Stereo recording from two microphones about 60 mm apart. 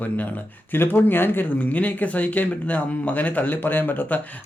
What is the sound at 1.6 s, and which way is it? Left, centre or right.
Speech, left.